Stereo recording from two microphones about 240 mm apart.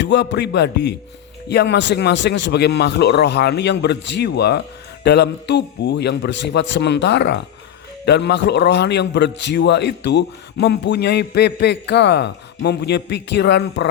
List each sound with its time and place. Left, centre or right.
0.0 s a man's voice: left